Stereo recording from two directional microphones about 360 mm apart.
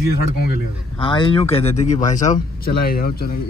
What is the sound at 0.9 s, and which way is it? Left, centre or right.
Speech, centre.